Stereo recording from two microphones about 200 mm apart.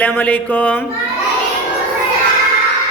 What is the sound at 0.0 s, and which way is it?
Speech, 10° left (ahead or behind).